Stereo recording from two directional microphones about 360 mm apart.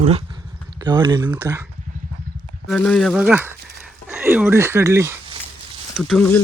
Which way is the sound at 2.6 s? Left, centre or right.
Centre.